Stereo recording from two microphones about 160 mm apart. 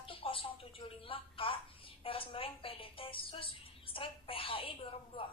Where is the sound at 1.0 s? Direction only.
35° left (ahead or behind).